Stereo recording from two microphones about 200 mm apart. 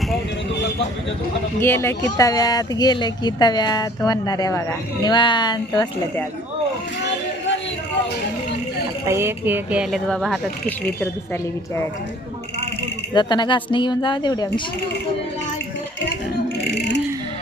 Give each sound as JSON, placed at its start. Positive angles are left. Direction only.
{"t": 1.6, "sound": "speech", "side_deg": 10}
{"t": 7.0, "sound": "a sound", "side_deg": 65}
{"t": 9.0, "sound": "speech", "side_deg": -15}
{"t": 13.1, "sound": "speech", "side_deg": 20}